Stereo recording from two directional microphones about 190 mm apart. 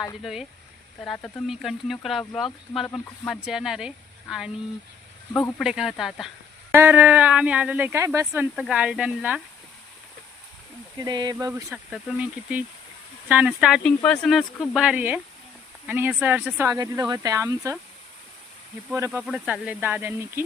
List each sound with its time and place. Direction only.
0.2 s speech: centre (ahead or behind)
5.3 s speech: 10° left (ahead or behind)
5.5 s speech: 5° right (ahead or behind)
11.0 s speech: 20° right (ahead or behind)
11.9 s speech: 5° right (ahead or behind)
18.9 s speech: 15° right (ahead or behind)
19.2 s speech: 5° right (ahead or behind)